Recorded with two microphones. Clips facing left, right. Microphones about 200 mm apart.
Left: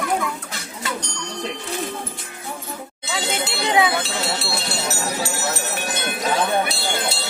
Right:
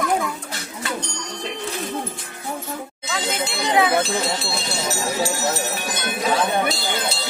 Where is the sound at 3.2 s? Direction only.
70° left (ahead or behind).